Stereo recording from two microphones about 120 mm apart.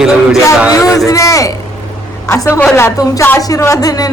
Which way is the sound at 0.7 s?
30° left (ahead or behind).